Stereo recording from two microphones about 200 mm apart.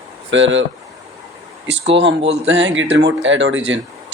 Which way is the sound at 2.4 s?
65° right (ahead or behind).